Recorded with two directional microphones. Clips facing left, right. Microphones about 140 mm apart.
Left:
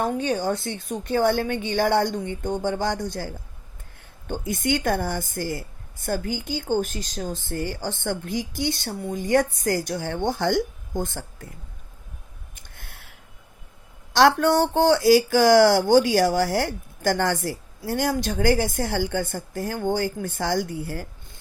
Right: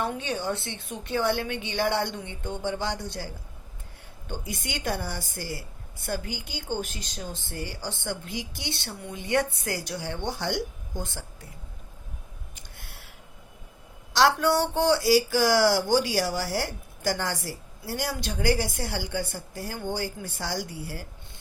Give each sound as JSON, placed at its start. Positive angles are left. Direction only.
{"t": 0.0, "sound": "a woman's voice", "side_deg": 45}
{"t": 4.3, "sound": "a woman's voice", "side_deg": 50}
{"t": 12.5, "sound": "a sound", "side_deg": 50}
{"t": 14.1, "sound": "a woman's voice", "side_deg": 50}